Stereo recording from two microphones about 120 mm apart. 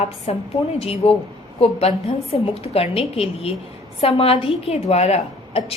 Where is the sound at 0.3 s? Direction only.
60° left (ahead or behind).